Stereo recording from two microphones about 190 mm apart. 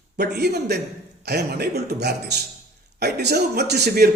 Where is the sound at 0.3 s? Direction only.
60° right (ahead or behind).